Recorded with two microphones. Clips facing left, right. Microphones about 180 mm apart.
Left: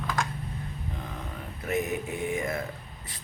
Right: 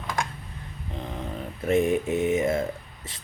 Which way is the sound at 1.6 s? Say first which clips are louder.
Right 7 dB; 25° right (ahead or behind).